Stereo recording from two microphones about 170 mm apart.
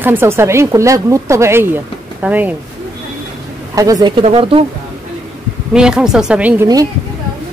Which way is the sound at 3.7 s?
20° right (ahead or behind).